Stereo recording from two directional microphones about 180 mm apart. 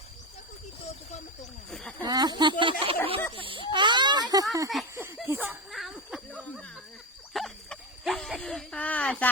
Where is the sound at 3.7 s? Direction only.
25° right (ahead or behind).